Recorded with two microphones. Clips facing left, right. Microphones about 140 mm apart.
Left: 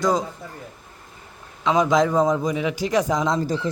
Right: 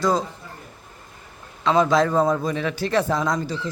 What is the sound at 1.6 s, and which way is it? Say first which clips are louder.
A man's voice: even; 15° left (ahead or behind).